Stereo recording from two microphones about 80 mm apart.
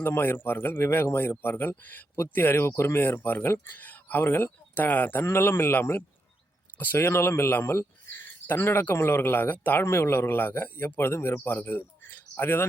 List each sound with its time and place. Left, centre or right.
0.0 s speech: left